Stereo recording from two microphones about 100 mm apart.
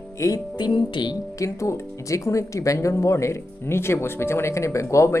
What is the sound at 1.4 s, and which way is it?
Speech, 30° left (ahead or behind).